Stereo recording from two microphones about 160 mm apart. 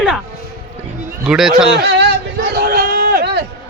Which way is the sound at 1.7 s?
90° right.